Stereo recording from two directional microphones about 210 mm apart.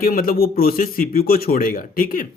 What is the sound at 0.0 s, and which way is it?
Speech, 45° left (ahead or behind).